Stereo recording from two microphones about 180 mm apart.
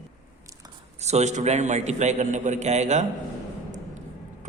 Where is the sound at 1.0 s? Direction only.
40° right (ahead or behind).